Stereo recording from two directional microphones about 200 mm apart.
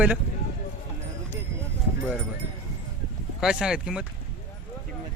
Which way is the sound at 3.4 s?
5° right (ahead or behind).